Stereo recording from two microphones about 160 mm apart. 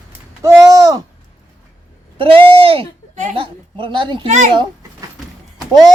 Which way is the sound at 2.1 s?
35° right (ahead or behind).